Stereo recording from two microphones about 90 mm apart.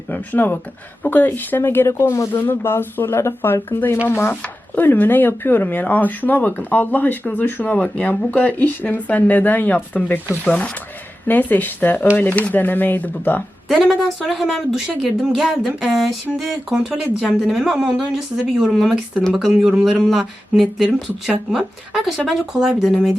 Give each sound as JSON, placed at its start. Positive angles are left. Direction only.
{"t": 0.1, "sound": "speech", "side_deg": 20}
{"t": 2.3, "sound": "speech", "side_deg": 25}
{"t": 13.7, "sound": "speech", "side_deg": 0}